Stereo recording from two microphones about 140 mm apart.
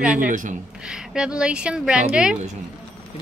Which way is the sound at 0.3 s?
65° right (ahead or behind).